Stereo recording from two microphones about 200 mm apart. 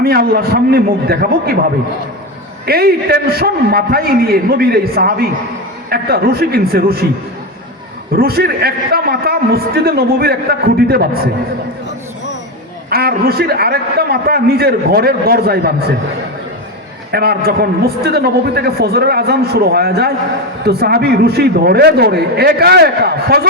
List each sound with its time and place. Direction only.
0.0 s a man's voice: 50° right (ahead or behind)
2.6 s a man's voice: 50° right (ahead or behind)
8.1 s a man's voice: 50° right (ahead or behind)
12.9 s a man's voice: 50° right (ahead or behind)
17.1 s a man's voice: 50° right (ahead or behind)